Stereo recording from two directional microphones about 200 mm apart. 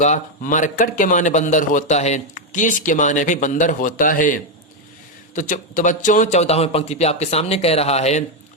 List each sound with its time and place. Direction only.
0.0 s a man's voice: 35° left (ahead or behind)